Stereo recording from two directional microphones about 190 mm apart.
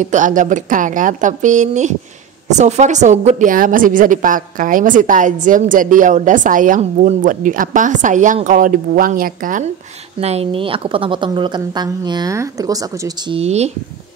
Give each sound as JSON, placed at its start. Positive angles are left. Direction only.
{"t": 0.0, "sound": "a woman's voice", "side_deg": -40}
{"t": 10.2, "sound": "a woman's voice", "side_deg": -30}
{"t": 13.4, "sound": "a woman's voice", "side_deg": -35}